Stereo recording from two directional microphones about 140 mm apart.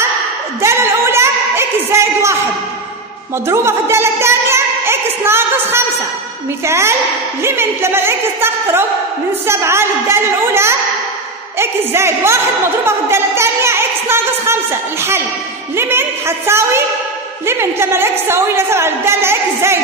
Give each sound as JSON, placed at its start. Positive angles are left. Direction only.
{"t": 0.6, "sound": "a sound", "side_deg": -20}
{"t": 3.4, "sound": "a woman's voice", "side_deg": -20}
{"t": 15.7, "sound": "a woman's voice", "side_deg": -15}